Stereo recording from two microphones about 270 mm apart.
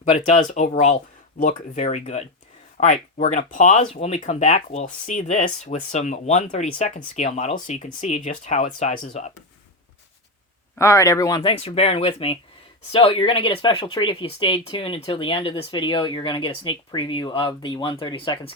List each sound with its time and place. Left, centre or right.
0.0 s speech: left
10.8 s speech: centre